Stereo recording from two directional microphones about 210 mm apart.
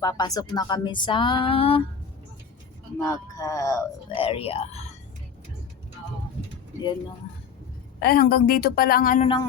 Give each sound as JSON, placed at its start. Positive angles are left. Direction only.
{"t": 0.0, "sound": "speech", "side_deg": 20}
{"t": 3.1, "sound": "speech", "side_deg": 15}
{"t": 4.2, "sound": "speech", "side_deg": 25}
{"t": 8.0, "sound": "a woman's voice", "side_deg": 45}
{"t": 9.2, "sound": "speech", "side_deg": 25}